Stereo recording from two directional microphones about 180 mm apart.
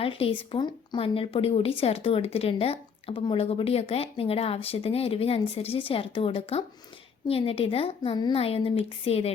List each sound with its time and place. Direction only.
0.0 s speech: 30° left (ahead or behind)